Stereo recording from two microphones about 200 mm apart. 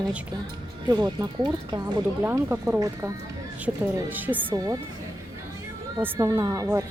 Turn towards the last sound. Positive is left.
turn(degrees=-15)  # may be behind; listen again after turning